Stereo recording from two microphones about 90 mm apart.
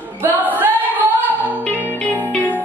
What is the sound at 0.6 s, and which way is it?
Singing, 20° right (ahead or behind).